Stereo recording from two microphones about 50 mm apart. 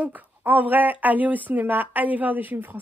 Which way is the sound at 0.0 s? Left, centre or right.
Right.